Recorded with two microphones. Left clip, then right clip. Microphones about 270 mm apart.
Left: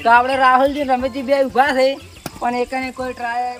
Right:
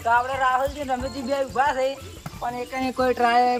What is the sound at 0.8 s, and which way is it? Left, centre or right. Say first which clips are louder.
Speech: left 8 dB; left.